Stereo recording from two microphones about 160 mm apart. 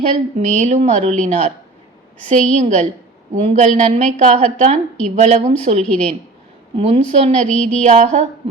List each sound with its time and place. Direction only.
0.0 s a woman's voice: 45° right (ahead or behind)
7.4 s a sound: 5° left (ahead or behind)
7.8 s a woman's voice: 45° right (ahead or behind)